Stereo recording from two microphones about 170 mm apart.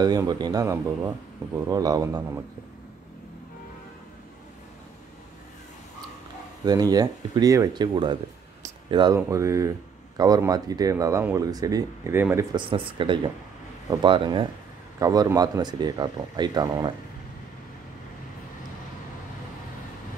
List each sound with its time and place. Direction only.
0.0 s speech: 25° right (ahead or behind)
6.6 s speech: 25° right (ahead or behind)
12.5 s speech: 30° right (ahead or behind)